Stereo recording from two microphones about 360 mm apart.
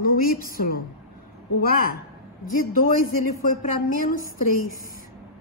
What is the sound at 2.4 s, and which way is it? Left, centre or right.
A woman's voice, left.